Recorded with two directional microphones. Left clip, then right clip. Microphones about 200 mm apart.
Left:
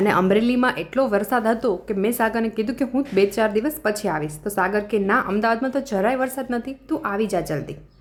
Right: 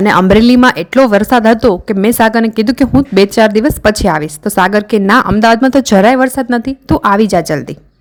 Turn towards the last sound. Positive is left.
turn(degrees=-40)  # may be behind; listen again after turning